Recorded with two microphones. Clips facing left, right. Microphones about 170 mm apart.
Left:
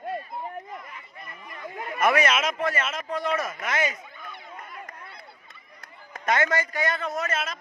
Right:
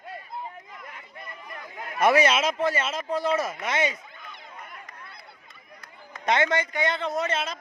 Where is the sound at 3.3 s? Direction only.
Centre (ahead or behind).